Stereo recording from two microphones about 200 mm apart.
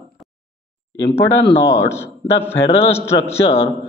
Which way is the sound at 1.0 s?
20° left (ahead or behind).